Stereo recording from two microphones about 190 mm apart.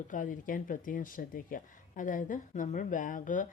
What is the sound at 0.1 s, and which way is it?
Speech, 45° left (ahead or behind).